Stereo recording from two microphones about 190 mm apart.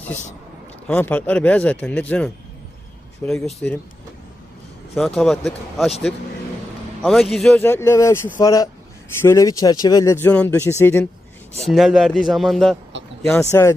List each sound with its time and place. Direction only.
0.9 s a man's voice: 10° left (ahead or behind)
4.9 s speech: 5° left (ahead or behind)
7.0 s a man's voice: centre (ahead or behind)
11.7 s speech: centre (ahead or behind)
13.2 s a man's voice: 15° left (ahead or behind)